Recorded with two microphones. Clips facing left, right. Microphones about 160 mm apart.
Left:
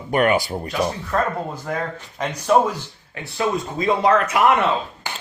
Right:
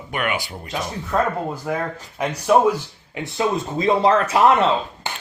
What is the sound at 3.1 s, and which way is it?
Speech, 20° right (ahead or behind).